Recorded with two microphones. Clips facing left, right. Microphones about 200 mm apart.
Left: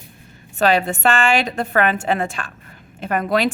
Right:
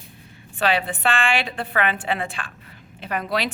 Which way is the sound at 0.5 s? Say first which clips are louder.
Left 5 dB; 45° left (ahead or behind).